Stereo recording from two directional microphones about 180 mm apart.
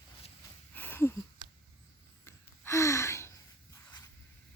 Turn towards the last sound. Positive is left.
turn(degrees=15)  # may be behind; listen again after turning